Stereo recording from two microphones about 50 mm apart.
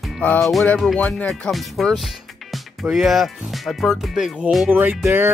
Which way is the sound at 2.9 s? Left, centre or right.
Centre.